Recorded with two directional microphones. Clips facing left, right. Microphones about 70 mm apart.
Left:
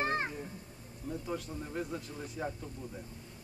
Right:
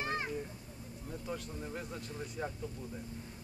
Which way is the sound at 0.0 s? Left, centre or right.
Left.